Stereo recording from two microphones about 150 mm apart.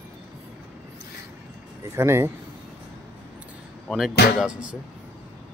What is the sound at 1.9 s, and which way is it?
Speech, 20° right (ahead or behind).